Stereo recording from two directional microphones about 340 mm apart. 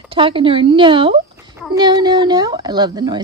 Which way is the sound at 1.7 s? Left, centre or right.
Centre.